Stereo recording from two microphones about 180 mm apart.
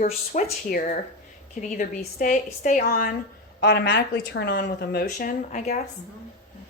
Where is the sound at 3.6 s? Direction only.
70° left (ahead or behind); by 5.8 s 45° left (ahead or behind).